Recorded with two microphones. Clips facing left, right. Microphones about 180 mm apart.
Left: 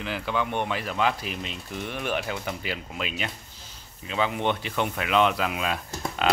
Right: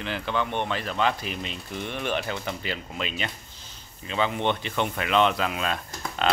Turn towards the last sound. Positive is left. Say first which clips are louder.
# left 1 dB
turn(degrees=5)  # may be behind; listen again after turning